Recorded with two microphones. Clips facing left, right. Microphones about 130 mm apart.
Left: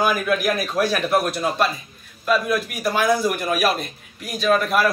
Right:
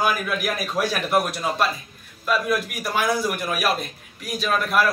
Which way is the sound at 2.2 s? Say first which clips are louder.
Left 2 dB; centre (ahead or behind).